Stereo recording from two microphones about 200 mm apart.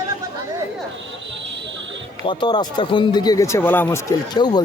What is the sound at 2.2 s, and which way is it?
Speech, 25° left (ahead or behind).